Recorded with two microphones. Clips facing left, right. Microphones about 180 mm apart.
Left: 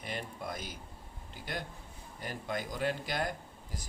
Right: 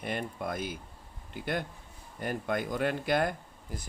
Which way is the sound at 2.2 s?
55° right (ahead or behind).